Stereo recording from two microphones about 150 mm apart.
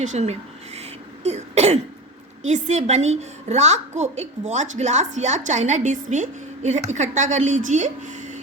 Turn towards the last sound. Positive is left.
turn(degrees=-55)  # may be behind; listen again after turning